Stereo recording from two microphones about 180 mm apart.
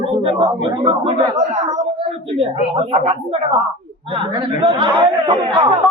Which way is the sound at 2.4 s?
35° right (ahead or behind).